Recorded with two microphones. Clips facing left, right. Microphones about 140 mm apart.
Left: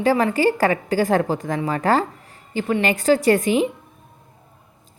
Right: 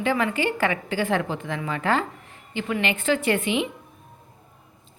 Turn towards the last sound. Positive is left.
turn(degrees=40)  # may be behind; listen again after turning